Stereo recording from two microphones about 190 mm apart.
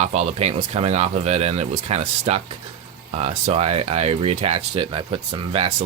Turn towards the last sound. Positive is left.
turn(degrees=-30)  # may be behind; listen again after turning